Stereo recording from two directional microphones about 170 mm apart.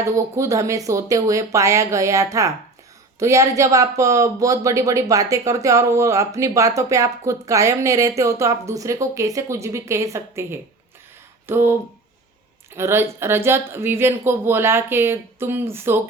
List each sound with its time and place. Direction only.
0.0 s speech: 15° right (ahead or behind)